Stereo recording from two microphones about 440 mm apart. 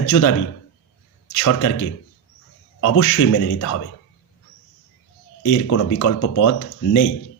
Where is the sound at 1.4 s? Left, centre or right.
Left.